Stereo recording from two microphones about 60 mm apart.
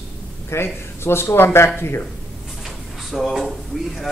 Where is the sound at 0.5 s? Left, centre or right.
Left.